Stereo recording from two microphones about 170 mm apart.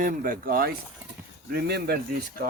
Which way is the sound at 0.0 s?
55° right (ahead or behind).